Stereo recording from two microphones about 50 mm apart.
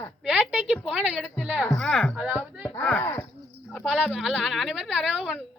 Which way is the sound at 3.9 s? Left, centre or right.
Centre.